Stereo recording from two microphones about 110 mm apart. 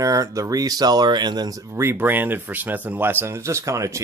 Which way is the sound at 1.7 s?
20° right (ahead or behind).